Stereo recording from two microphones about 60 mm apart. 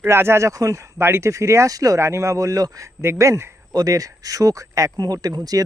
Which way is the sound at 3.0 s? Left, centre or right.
Right.